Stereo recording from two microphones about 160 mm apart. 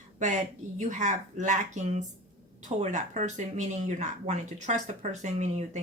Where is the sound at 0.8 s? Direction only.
50° right (ahead or behind).